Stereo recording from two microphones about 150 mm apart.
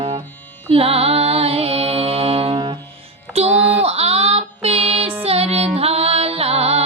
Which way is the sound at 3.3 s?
45° right (ahead or behind).